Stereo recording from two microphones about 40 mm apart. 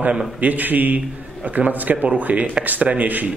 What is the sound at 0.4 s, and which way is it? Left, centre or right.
A man's voice, right.